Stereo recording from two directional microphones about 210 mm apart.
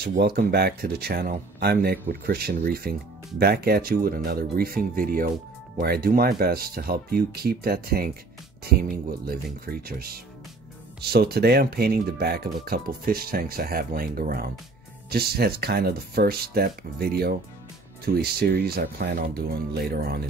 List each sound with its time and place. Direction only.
0.0 s speech: 45° right (ahead or behind)